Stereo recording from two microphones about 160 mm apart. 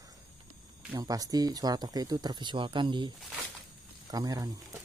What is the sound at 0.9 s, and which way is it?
Speech, 20° right (ahead or behind).